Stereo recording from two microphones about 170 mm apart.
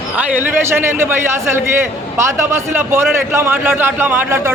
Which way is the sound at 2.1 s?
15° right (ahead or behind).